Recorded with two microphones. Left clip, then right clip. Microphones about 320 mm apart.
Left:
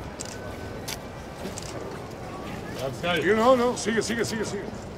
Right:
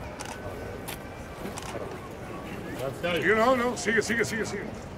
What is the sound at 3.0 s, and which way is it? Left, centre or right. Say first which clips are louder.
Speech: left 1 dB; centre.